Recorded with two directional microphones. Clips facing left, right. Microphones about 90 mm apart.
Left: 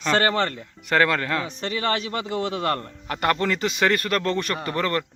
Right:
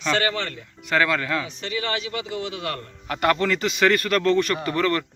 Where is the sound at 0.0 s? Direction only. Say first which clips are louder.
Left 3 dB; 40° left (ahead or behind).